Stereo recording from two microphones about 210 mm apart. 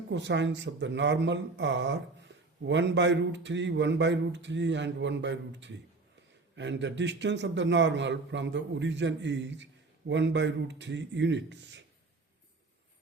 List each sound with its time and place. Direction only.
0.1 s speech: 55° right (ahead or behind)